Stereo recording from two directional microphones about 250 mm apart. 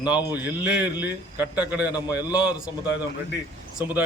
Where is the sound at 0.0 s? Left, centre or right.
Centre.